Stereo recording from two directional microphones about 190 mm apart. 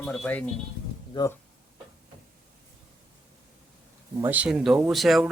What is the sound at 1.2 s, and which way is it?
Speech, 25° left (ahead or behind).